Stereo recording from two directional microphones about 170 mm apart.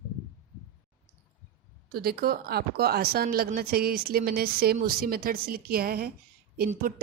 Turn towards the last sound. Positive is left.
turn(degrees=-60)  # may be behind; listen again after turning